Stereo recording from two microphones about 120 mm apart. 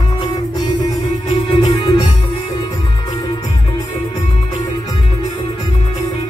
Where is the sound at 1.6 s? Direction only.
40° left (ahead or behind).